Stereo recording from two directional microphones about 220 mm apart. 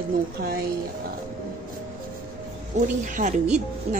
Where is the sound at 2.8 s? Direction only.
35° right (ahead or behind).